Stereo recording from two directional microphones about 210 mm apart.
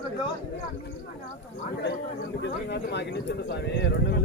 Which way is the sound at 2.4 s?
55° left (ahead or behind).